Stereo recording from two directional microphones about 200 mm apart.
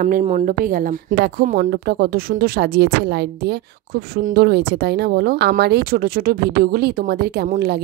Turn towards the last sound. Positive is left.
turn(degrees=-50)  # may be behind; listen again after turning